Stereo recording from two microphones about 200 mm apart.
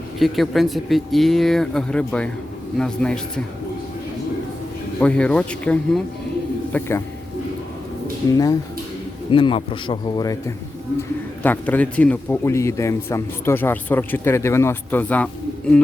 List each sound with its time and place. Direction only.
0.2 s speech: centre (ahead or behind)
4.9 s a man's voice: 5° left (ahead or behind)
8.3 s a man's voice: 20° left (ahead or behind)
11.4 s a man's voice: 10° left (ahead or behind)